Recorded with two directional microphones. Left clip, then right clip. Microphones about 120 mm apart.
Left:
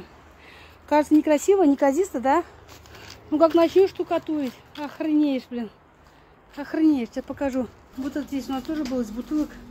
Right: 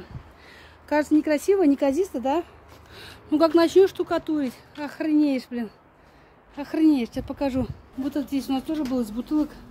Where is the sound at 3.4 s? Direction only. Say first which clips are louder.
Even; 20° right (ahead or behind).